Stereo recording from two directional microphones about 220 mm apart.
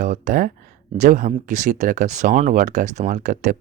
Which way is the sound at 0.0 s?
35° right (ahead or behind).